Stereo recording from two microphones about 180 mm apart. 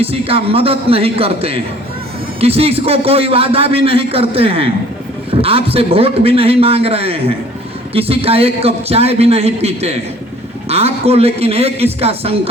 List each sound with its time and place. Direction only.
0.0 s a man's voice: 30° right (ahead or behind)